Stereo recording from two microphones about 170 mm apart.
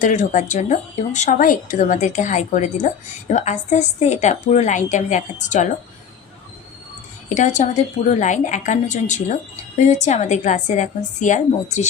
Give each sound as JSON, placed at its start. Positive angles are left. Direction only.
{"t": 0.0, "sound": "speech", "side_deg": 45}
{"t": 7.3, "sound": "speech", "side_deg": 45}